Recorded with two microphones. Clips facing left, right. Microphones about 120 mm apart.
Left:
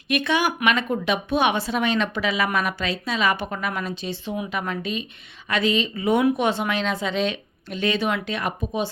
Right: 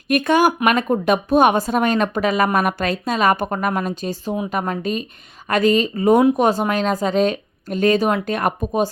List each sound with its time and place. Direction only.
0.1 s speech: 45° right (ahead or behind)